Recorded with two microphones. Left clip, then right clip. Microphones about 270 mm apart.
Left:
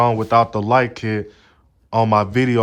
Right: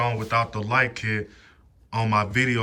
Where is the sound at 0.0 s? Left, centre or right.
Centre.